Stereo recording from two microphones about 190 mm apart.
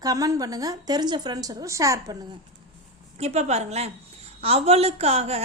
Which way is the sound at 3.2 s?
35° right (ahead or behind).